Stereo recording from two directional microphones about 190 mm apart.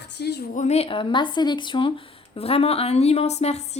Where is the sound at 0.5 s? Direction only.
35° left (ahead or behind).